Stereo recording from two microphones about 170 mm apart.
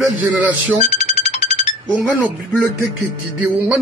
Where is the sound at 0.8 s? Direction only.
40° left (ahead or behind).